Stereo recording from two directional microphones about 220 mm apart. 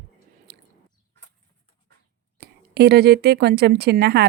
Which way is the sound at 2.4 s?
45° right (ahead or behind).